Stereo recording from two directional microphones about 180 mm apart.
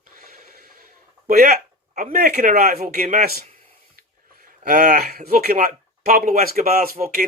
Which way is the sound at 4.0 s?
55° right (ahead or behind).